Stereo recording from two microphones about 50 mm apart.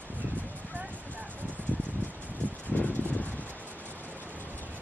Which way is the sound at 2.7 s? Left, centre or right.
Left.